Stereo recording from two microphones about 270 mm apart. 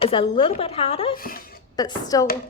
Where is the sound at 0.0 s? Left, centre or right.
Centre.